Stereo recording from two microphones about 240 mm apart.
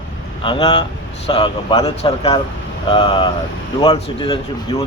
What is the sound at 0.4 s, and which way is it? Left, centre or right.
Speech, left.